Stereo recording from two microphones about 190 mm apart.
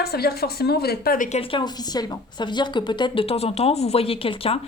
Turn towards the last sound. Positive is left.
turn(degrees=30)  # may be behind; listen again after turning